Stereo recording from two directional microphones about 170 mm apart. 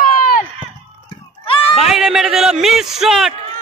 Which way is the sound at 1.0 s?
30° left (ahead or behind).